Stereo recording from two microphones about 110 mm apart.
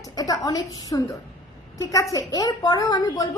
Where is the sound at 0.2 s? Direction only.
35° left (ahead or behind).